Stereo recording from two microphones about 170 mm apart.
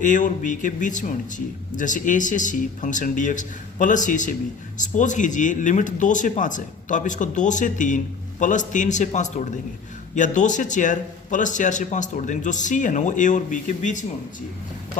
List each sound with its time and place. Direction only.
0.0 s speech: 50° left (ahead or behind)